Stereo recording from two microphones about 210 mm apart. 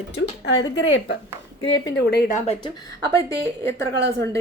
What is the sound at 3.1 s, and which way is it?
Speech, 10° left (ahead or behind).